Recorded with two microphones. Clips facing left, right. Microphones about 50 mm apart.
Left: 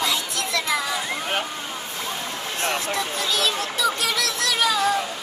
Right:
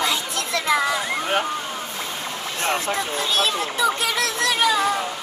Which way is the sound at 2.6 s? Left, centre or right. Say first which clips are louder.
Right 2 dB; right.